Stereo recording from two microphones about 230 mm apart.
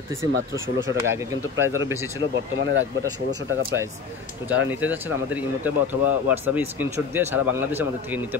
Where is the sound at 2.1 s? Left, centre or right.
Right.